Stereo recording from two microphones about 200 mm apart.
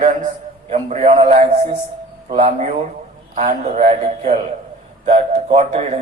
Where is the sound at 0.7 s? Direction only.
35° right (ahead or behind).